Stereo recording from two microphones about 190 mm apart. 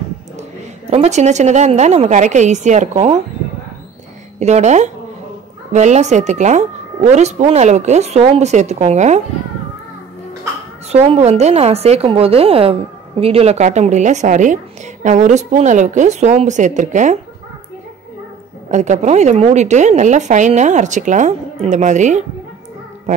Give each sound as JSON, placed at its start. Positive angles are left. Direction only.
{"t": 0.4, "sound": "a woman's voice", "side_deg": -35}
{"t": 4.4, "sound": "a woman's voice", "side_deg": -35}
{"t": 11.1, "sound": "a woman's voice", "side_deg": -35}
{"t": 18.7, "sound": "a woman's voice", "side_deg": -40}